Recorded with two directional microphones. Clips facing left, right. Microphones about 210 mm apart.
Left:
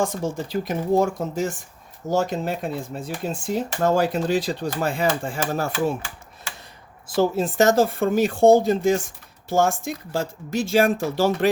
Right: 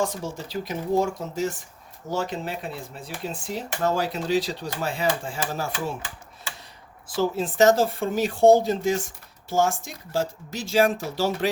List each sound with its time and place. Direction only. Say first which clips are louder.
0.0 s speech: left 3 dB; 50° left (ahead or behind)
7.2 s speech: left 2 dB; 45° left (ahead or behind)